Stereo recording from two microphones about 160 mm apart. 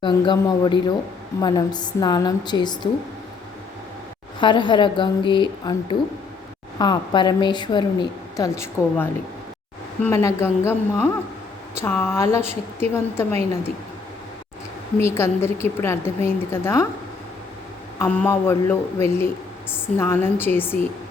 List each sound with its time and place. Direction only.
0.0 s a woman's voice: 30° left (ahead or behind)
4.4 s a woman's voice: 30° left (ahead or behind)
8.4 s a woman's voice: 15° left (ahead or behind)
14.9 s a woman's voice: 15° left (ahead or behind)
18.0 s a woman's voice: 10° left (ahead or behind)